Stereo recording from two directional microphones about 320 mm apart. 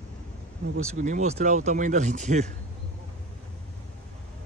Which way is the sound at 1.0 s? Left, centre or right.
Right.